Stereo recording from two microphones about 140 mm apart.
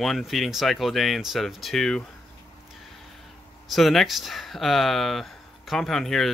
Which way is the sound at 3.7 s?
Centre (ahead or behind).